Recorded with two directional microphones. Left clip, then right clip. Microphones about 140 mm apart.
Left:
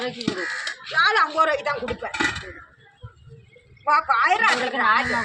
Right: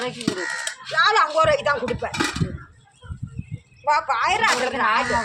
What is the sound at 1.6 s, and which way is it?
Speech, 20° right (ahead or behind).